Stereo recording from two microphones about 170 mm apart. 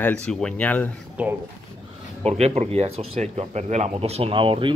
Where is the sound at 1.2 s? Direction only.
10° right (ahead or behind).